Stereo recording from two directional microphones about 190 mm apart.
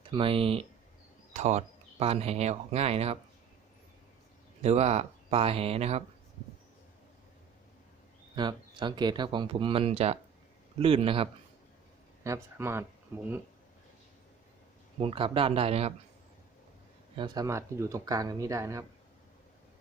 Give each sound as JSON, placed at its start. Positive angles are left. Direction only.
{"t": 0.1, "sound": "speech", "side_deg": -30}
{"t": 4.6, "sound": "speech", "side_deg": -35}
{"t": 8.4, "sound": "speech", "side_deg": -25}
{"t": 12.2, "sound": "speech", "side_deg": -15}
{"t": 15.0, "sound": "speech", "side_deg": -30}
{"t": 17.2, "sound": "speech", "side_deg": -20}